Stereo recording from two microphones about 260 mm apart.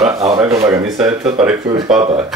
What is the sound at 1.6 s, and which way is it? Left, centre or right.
Speech, centre.